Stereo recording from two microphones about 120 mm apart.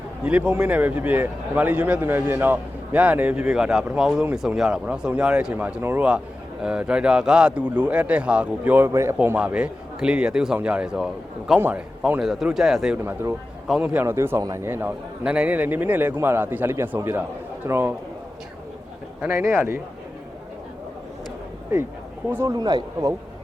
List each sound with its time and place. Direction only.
0.3 s a man's voice: 10° right (ahead or behind)
12.2 s a man's voice: centre (ahead or behind)
14.0 s a man's voice: 20° right (ahead or behind)
19.3 s speech: 20° right (ahead or behind)
22.4 s a man's voice: 35° right (ahead or behind)